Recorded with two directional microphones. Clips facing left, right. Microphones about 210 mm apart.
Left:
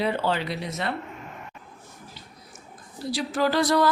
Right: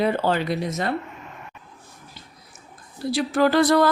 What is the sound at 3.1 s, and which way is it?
Speech, 55° right (ahead or behind).